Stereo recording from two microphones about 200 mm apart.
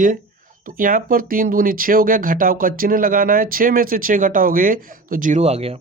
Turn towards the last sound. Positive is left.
turn(degrees=-30)  # may be behind; listen again after turning